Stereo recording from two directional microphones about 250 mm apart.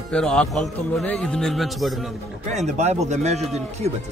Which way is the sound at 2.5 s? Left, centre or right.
Right.